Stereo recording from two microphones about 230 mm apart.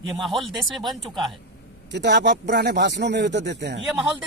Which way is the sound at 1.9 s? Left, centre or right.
Right.